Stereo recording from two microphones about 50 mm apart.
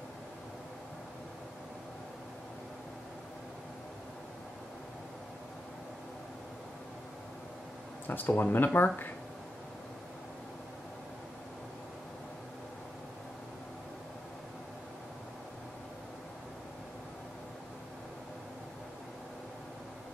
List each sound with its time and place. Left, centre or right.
8.1 s speech: left